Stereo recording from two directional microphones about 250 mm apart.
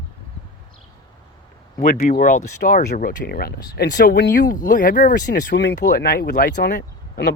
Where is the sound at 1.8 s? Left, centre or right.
Left.